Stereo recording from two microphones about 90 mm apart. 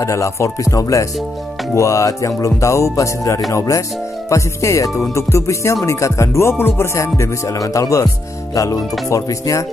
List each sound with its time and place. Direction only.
0.0 s music: 35° left (ahead or behind)